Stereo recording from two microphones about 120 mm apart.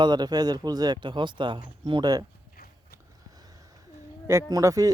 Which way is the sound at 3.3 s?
30° right (ahead or behind).